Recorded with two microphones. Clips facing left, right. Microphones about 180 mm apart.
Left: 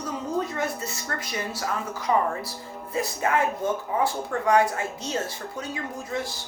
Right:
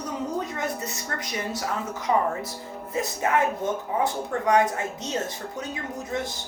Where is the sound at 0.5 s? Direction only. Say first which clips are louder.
Left 1 dB; 20° right (ahead or behind).